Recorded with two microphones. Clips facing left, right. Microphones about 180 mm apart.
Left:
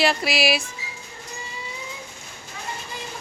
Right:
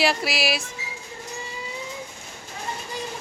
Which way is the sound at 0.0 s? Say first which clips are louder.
Left 2 dB; 5° right (ahead or behind).